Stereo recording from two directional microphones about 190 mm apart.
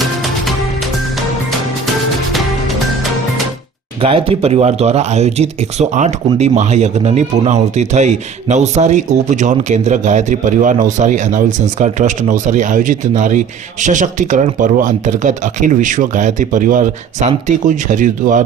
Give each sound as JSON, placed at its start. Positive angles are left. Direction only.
{"t": 0.0, "sound": "music", "side_deg": 0}
{"t": 4.0, "sound": "speech", "side_deg": -30}